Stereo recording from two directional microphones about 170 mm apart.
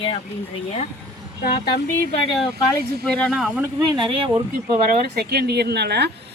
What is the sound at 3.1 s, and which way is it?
Speech, centre (ahead or behind).